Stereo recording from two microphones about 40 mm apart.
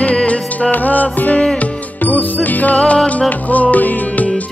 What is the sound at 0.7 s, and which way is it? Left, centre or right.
Music, left.